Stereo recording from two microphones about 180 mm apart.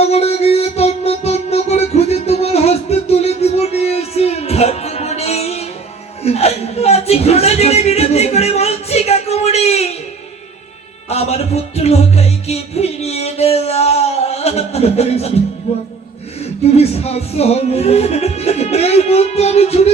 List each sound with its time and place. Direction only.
0.0 s music: 35° left (ahead or behind)
6.2 s a sound: 35° left (ahead or behind)
11.1 s music: 35° left (ahead or behind)
15.7 s speech: 35° left (ahead or behind)
16.4 s music: 35° left (ahead or behind)